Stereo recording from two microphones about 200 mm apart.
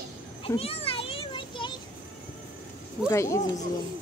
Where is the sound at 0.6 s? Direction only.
30° left (ahead or behind).